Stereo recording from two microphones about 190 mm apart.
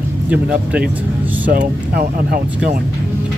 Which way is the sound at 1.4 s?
50° right (ahead or behind).